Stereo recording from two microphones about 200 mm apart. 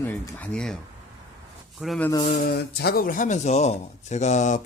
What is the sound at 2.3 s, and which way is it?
Speech, 50° left (ahead or behind).